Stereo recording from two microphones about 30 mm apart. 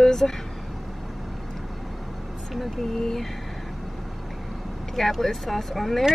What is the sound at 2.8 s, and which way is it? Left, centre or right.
Speech, centre.